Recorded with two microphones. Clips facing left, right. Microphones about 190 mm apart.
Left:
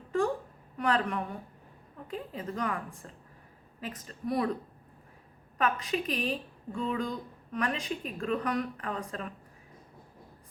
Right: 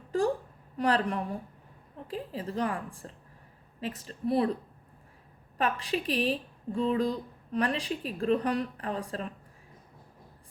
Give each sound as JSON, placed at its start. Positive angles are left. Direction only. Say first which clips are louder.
{"t": 0.8, "sound": "a woman's voice", "louder": "right 2 dB", "side_deg": -35}
{"t": 5.5, "sound": "speech", "louder": "even", "side_deg": -30}